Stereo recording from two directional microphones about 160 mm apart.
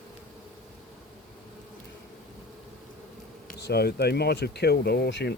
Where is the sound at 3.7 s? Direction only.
90° left.